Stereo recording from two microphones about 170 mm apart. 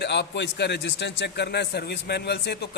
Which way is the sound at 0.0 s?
90° left.